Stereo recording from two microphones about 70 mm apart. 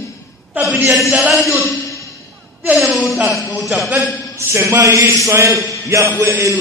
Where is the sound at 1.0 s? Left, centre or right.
Centre.